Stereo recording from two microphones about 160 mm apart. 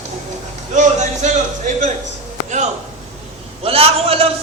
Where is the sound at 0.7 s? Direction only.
50° right (ahead or behind).